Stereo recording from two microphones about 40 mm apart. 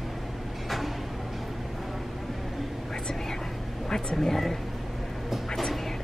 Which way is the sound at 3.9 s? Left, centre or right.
Centre.